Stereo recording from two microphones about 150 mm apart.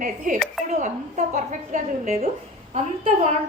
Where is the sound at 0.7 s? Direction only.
50° right (ahead or behind).